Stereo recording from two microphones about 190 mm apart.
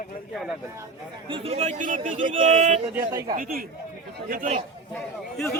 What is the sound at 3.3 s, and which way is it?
Speech, 50° right (ahead or behind).